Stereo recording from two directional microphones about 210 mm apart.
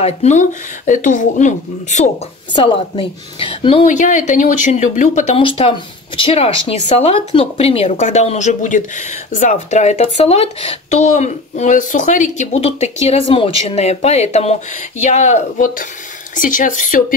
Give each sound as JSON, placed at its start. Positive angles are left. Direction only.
{"t": 0.0, "sound": "speech", "side_deg": 35}
{"t": 2.5, "sound": "a woman's voice", "side_deg": 25}
{"t": 3.8, "sound": "speech", "side_deg": 35}